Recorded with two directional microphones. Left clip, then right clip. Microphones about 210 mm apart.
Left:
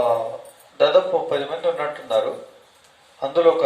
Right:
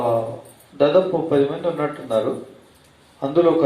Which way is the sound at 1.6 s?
45° left (ahead or behind).